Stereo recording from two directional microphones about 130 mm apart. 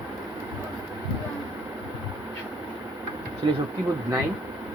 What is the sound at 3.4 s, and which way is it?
Speech, 35° right (ahead or behind).